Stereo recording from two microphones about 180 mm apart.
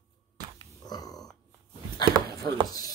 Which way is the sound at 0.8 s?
20° left (ahead or behind).